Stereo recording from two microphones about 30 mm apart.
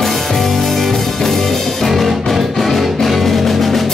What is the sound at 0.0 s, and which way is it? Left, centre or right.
Music, centre.